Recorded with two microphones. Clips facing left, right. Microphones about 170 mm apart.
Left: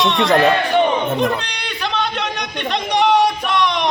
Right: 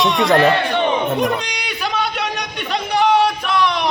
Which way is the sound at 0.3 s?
15° left (ahead or behind).